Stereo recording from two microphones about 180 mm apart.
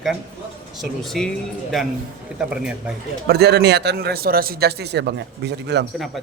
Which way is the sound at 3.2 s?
65° right (ahead or behind).